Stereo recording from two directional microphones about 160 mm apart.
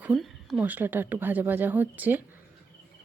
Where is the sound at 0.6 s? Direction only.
10° right (ahead or behind).